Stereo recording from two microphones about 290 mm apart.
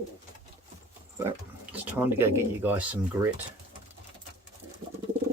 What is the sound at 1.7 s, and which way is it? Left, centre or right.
Speech, centre.